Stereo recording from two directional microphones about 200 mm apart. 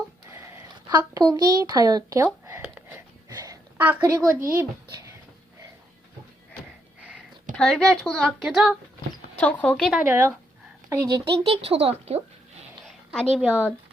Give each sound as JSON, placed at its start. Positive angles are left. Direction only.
{"t": 0.3, "sound": "a sound", "side_deg": -15}
{"t": 4.5, "sound": "a child's voice", "side_deg": -15}
{"t": 7.5, "sound": "a woman's voice", "side_deg": 5}
{"t": 10.1, "sound": "speech", "side_deg": -10}
{"t": 12.8, "sound": "a sound", "side_deg": 0}
{"t": 13.3, "sound": "speech", "side_deg": -5}